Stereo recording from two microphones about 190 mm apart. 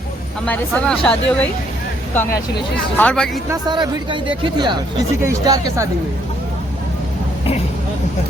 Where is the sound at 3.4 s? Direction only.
25° right (ahead or behind).